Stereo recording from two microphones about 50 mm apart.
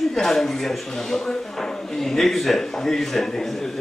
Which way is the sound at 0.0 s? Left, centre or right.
Centre.